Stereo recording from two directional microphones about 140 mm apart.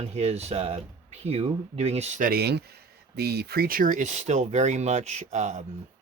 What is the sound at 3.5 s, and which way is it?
Speech, 90° right.